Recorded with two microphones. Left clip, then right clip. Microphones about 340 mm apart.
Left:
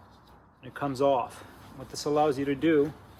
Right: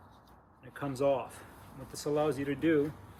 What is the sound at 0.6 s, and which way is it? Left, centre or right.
Speech, centre.